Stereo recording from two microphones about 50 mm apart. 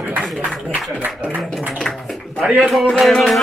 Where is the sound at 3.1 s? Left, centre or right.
Centre.